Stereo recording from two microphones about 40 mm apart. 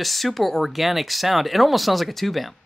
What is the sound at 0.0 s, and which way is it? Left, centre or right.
Speech, centre.